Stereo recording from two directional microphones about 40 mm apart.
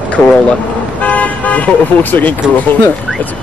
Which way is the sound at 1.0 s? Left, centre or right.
Left.